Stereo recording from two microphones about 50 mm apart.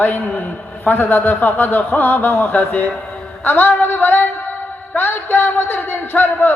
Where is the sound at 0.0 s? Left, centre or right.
Left.